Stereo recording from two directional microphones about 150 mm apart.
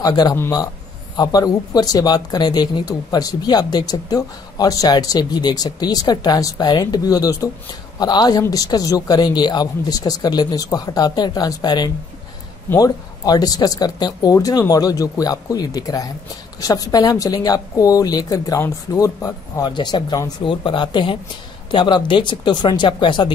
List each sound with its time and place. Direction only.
0.0 s speech: 25° left (ahead or behind)